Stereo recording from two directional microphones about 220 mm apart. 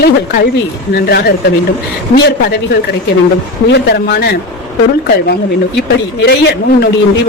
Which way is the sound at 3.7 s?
50° left (ahead or behind).